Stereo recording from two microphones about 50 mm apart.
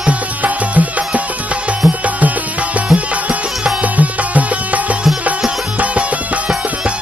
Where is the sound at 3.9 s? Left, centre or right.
Right.